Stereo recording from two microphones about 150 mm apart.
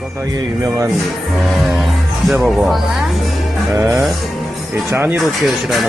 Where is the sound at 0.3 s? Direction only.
25° right (ahead or behind).